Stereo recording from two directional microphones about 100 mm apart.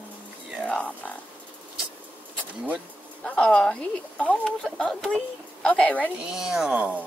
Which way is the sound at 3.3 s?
10° left (ahead or behind).